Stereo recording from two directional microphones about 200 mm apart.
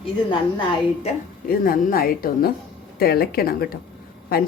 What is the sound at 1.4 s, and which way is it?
Speech, 45° left (ahead or behind).